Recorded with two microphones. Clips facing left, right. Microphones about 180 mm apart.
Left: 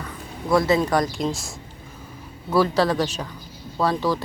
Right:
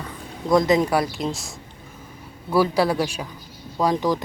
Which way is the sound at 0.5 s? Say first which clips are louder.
Right 1 dB; 20° right (ahead or behind).